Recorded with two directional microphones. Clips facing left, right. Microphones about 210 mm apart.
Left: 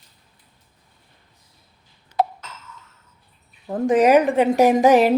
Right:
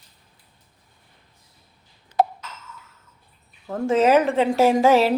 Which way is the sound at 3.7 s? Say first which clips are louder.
Left 2 dB; 15° left (ahead or behind).